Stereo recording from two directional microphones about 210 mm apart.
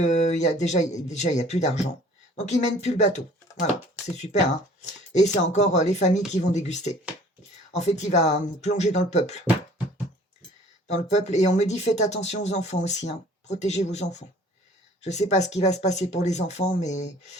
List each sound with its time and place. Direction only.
0.0 s speech: 35° left (ahead or behind)
5.1 s speech: 35° left (ahead or behind)
10.8 s speech: 35° left (ahead or behind)